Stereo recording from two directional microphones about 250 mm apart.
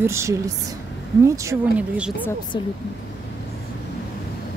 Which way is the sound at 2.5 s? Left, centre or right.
Centre.